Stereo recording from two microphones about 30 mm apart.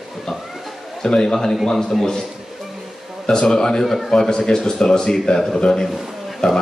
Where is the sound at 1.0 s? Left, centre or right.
Left.